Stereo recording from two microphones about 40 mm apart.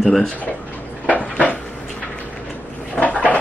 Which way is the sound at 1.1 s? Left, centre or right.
Left.